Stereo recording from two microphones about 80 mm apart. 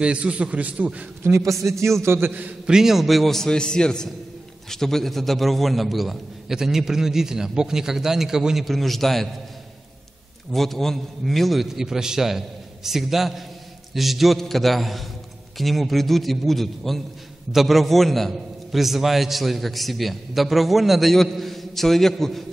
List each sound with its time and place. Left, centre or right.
0.0 s a man's voice: centre
1.2 s a man's voice: right
2.6 s a man's voice: centre
10.5 s a man's voice: centre